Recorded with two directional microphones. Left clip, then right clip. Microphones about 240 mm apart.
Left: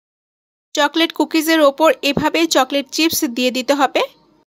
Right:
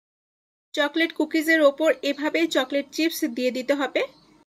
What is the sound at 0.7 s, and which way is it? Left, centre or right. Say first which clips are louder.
Speech: left 7 dB; left.